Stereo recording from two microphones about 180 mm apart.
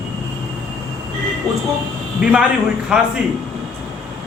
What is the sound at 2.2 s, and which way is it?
Speech, 5° right (ahead or behind).